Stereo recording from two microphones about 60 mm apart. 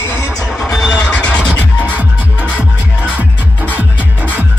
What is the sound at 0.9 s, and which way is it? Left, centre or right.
Music, left.